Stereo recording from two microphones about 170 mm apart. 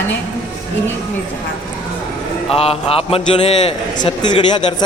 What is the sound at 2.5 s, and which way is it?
A man's voice, 35° left (ahead or behind).